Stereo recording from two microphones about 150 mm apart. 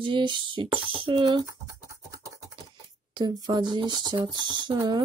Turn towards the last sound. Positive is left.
turn(degrees=-30)  # may be behind; listen again after turning